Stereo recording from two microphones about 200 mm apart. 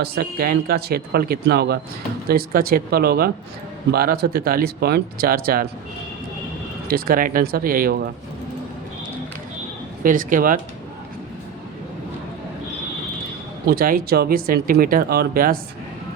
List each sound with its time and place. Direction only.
0.0 s speech: 50° right (ahead or behind)
6.8 s speech: 45° right (ahead or behind)
10.0 s speech: 45° right (ahead or behind)
13.7 s speech: 45° right (ahead or behind)